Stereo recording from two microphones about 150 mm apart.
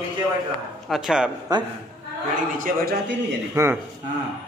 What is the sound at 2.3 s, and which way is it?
Speech, 60° right (ahead or behind).